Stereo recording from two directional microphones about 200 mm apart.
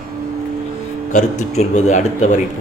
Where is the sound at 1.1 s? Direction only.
35° left (ahead or behind).